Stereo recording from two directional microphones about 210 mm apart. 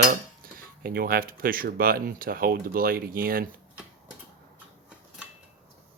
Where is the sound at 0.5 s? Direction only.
45° right (ahead or behind).